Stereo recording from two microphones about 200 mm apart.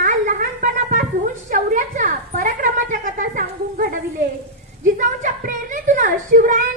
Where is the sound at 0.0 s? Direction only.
40° right (ahead or behind).